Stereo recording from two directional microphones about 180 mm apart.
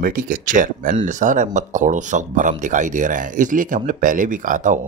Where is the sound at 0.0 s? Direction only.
50° right (ahead or behind).